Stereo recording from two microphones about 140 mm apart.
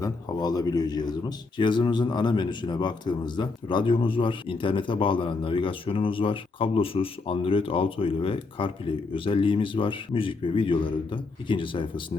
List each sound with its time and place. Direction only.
0.0 s speech: 30° left (ahead or behind)